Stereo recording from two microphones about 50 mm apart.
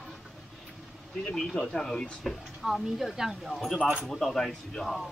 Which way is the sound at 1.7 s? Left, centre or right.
Centre.